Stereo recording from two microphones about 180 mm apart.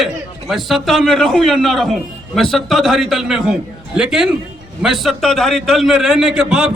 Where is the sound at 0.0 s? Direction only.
Centre (ahead or behind).